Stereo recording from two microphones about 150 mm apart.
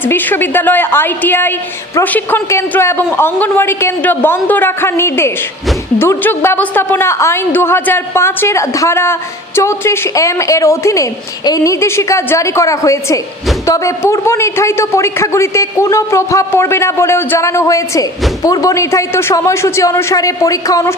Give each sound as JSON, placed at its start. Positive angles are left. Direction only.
{"t": 0.0, "sound": "a man's voice", "side_deg": 10}